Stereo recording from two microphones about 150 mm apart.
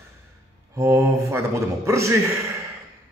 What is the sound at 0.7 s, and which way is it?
A man's voice, 15° right (ahead or behind).